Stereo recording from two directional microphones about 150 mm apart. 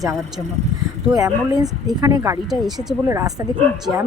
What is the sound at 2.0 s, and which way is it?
Speech, 25° right (ahead or behind).